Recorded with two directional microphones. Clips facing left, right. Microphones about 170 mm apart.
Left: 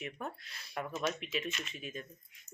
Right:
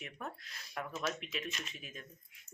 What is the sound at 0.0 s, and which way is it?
Speech, centre (ahead or behind).